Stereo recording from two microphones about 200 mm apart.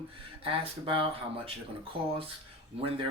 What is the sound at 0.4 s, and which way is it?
Speech, 25° right (ahead or behind).